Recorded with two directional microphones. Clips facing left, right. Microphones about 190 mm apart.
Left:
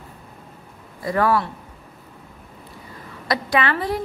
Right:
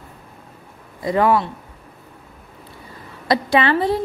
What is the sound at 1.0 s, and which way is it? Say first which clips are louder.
Speech: right 3 dB; 20° right (ahead or behind).